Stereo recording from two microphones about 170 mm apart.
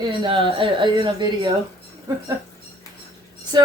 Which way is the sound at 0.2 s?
30° right (ahead or behind).